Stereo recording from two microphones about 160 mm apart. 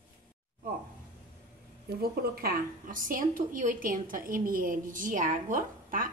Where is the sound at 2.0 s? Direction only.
70° right (ahead or behind).